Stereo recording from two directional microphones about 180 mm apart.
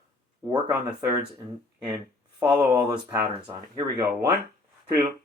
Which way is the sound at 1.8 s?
10° right (ahead or behind).